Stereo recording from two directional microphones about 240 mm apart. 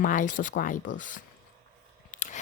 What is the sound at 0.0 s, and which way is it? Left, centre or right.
Speech, left.